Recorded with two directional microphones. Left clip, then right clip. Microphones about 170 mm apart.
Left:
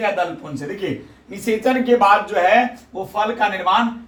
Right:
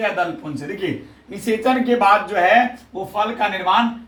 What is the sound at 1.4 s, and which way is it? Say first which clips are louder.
Speech: even; 15° right (ahead or behind).